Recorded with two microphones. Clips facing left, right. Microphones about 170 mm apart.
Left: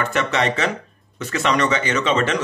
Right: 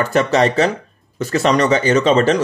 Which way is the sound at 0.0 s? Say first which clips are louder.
Right 6 dB; 35° right (ahead or behind).